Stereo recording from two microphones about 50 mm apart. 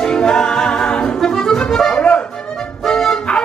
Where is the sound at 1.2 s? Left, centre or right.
Centre.